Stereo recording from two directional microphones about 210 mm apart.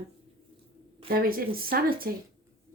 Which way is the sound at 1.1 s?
45° right (ahead or behind).